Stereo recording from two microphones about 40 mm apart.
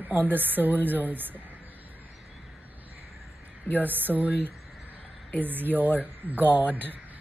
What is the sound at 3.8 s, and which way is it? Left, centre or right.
Speech, right.